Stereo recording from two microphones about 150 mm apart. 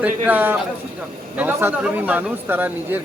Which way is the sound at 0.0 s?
10° right (ahead or behind).